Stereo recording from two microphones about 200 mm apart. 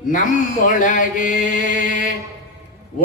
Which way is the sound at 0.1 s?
40° left (ahead or behind).